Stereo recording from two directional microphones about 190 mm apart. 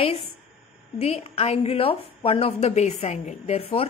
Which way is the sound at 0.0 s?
30° left (ahead or behind).